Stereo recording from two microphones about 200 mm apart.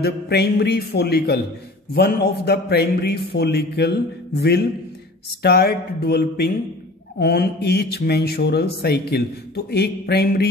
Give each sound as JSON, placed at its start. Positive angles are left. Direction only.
{"t": 0.0, "sound": "a man's voice", "side_deg": 55}